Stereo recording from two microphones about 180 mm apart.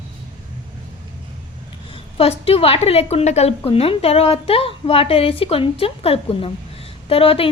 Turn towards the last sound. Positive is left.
turn(degrees=30)  # may be behind; listen again after turning